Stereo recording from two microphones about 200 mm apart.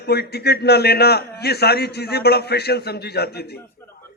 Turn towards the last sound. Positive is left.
turn(degrees=55)  # may be behind; listen again after turning